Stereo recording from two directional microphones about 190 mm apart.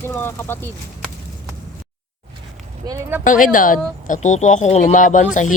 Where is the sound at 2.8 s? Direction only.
15° right (ahead or behind).